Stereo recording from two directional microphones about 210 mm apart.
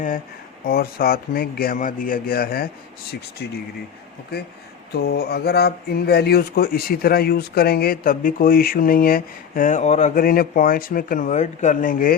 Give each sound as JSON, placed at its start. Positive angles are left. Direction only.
{"t": 0.6, "sound": "speech", "side_deg": 45}
{"t": 4.9, "sound": "speech", "side_deg": 50}